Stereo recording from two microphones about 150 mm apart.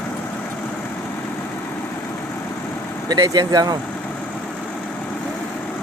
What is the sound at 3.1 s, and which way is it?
Speech, 25° right (ahead or behind).